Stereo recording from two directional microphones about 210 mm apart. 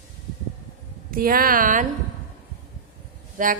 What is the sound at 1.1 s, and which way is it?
Speech, 45° right (ahead or behind).